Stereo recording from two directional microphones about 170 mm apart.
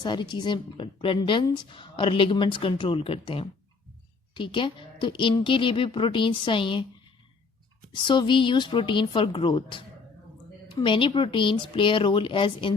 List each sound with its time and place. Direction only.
0.0 s speech: 25° left (ahead or behind)
7.9 s speech: 30° left (ahead or behind)